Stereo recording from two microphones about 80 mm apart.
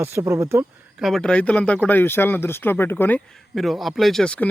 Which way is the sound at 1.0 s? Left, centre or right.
Centre.